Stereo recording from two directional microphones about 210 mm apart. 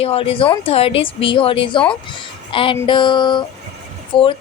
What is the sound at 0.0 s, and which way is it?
A woman's voice, 25° left (ahead or behind).